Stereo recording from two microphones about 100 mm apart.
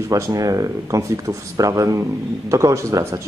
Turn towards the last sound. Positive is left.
turn(degrees=-30)  # may be behind; listen again after turning